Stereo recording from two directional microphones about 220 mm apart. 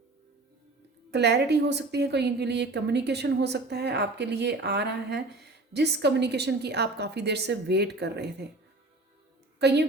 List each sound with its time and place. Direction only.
1.1 s a woman's voice: 50° right (ahead or behind)
9.6 s a woman's voice: 50° right (ahead or behind)